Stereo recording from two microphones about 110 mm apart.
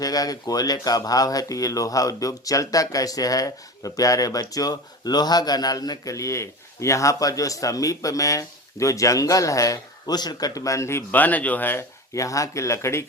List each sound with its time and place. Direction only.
0.0 s speech: 35° left (ahead or behind)